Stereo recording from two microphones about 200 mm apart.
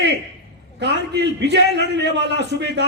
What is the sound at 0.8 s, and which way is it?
A man's voice, 60° right (ahead or behind).